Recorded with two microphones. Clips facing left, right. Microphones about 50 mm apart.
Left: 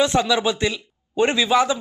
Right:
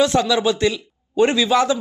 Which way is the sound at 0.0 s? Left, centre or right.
Centre.